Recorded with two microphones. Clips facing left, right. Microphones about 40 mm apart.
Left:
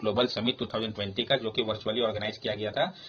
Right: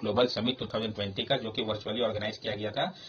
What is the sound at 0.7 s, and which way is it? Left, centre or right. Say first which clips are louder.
Speech: even; centre.